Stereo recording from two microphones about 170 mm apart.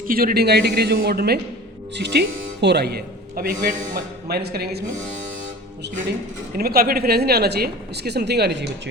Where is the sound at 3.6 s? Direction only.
50° right (ahead or behind).